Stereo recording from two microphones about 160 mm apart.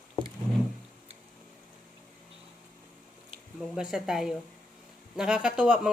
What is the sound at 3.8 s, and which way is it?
Speech, 5° right (ahead or behind).